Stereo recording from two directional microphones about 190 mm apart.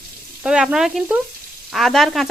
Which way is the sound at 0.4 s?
5° right (ahead or behind).